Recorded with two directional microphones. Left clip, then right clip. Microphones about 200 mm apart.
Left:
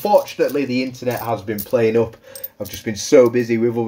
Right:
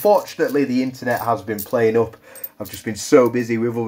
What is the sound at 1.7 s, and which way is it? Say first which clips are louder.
Speech: left 1 dB; 5° right (ahead or behind).